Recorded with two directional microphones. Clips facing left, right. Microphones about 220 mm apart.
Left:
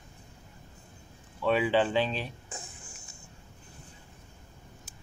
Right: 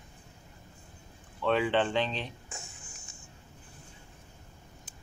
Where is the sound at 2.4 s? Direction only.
35° left (ahead or behind).